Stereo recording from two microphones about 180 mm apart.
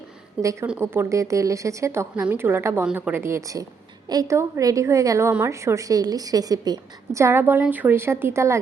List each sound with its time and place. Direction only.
0.4 s a woman's voice: 15° right (ahead or behind)